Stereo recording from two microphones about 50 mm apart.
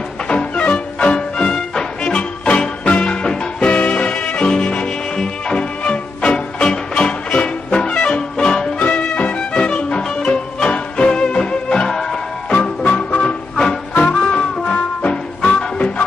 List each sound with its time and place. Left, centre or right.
0.3 s music: left
8.8 s music: left; by 12.5 s centre
12.8 s music: left
13.6 s music: centre
14.0 s music: left